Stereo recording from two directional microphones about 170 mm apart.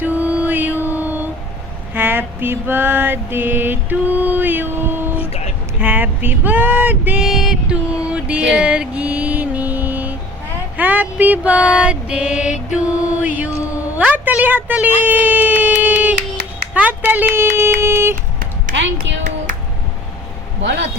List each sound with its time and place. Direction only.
0.0 s mantra: 10° right (ahead or behind)
5.8 s female singing: 10° right (ahead or behind)
8.5 s mantra: 5° right (ahead or behind)
13.2 s speech: 10° right (ahead or behind)
13.9 s a sound: 10° right (ahead or behind)
19.0 s music: 90° right
20.6 s a sound: 90° right